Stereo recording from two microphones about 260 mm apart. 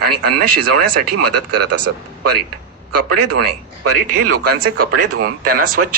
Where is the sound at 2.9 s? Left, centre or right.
Right.